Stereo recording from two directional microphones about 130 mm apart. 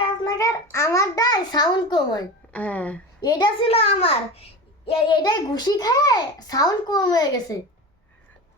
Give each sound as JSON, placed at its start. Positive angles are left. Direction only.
{"t": 0.0, "sound": "a child's voice", "side_deg": 25}
{"t": 2.5, "sound": "speech", "side_deg": 10}
{"t": 3.2, "sound": "a child's voice", "side_deg": 30}
{"t": 3.7, "sound": "a child's voice", "side_deg": 50}
{"t": 4.9, "sound": "a child's voice", "side_deg": 40}